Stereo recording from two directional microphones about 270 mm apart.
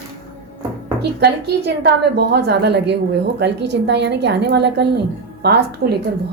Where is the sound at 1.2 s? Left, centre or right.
Right.